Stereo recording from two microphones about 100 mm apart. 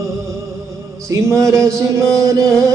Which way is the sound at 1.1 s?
30° right (ahead or behind).